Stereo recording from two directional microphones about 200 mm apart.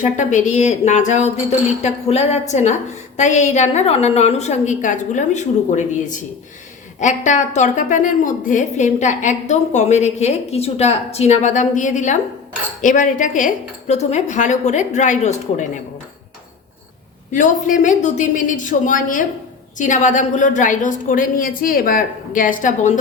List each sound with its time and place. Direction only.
0.0 s a woman's voice: 40° left (ahead or behind)
17.3 s a woman's voice: 40° left (ahead or behind)